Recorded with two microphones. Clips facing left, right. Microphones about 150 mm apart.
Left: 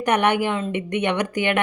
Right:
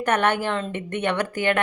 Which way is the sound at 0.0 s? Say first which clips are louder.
Left 2 dB; 15° left (ahead or behind).